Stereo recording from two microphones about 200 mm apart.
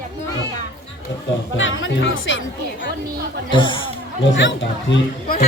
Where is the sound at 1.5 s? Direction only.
70° left (ahead or behind).